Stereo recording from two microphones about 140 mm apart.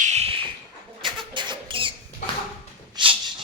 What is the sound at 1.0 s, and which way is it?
Rodents, 35° right (ahead or behind).